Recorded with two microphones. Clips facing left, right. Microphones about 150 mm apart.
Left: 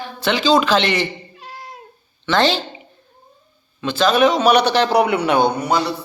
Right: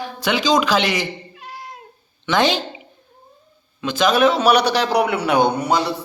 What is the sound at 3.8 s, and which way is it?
A man's voice, 15° right (ahead or behind).